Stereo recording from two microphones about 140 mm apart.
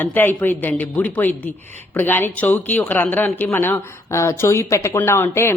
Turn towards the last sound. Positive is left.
turn(degrees=20)  # may be behind; listen again after turning